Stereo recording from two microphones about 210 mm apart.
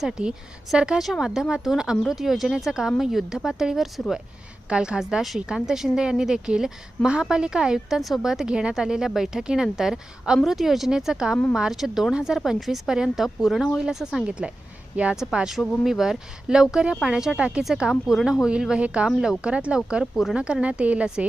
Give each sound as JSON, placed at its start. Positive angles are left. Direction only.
{"t": 0.0, "sound": "a woman's voice", "side_deg": -5}